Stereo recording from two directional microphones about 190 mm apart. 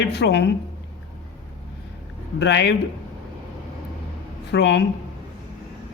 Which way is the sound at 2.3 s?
65° left (ahead or behind).